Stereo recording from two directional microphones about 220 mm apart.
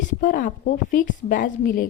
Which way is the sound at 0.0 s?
35° left (ahead or behind).